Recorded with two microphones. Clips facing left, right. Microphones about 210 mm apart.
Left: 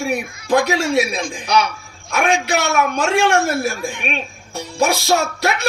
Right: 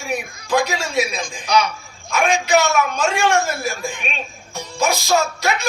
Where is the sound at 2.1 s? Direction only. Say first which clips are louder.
Right 1 dB; 60° left (ahead or behind).